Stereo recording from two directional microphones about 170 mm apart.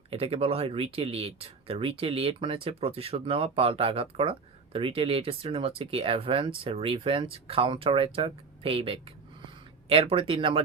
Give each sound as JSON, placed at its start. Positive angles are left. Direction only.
{"t": 0.1, "sound": "speech", "side_deg": -35}